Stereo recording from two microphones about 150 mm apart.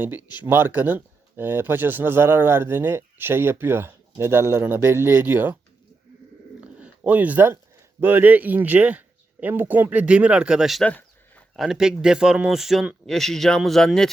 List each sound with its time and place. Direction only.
0.2 s speech: 30° left (ahead or behind)
0.4 s speech: 15° right (ahead or behind)
6.6 s a sound: 10° right (ahead or behind)
8.0 s speech: 10° right (ahead or behind)
10.9 s a sound: 10° left (ahead or behind)
11.6 s a man's voice: 5° right (ahead or behind)